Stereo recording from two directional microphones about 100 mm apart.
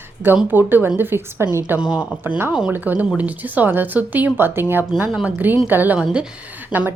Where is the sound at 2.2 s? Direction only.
20° right (ahead or behind).